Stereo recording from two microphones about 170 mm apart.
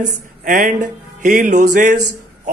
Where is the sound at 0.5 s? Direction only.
50° right (ahead or behind).